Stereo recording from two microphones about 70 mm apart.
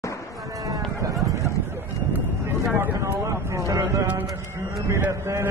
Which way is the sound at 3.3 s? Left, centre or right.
Right.